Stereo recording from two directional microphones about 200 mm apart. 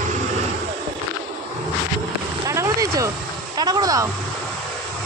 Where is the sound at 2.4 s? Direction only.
15° right (ahead or behind).